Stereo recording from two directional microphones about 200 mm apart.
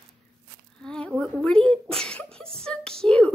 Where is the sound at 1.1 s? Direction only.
5° right (ahead or behind).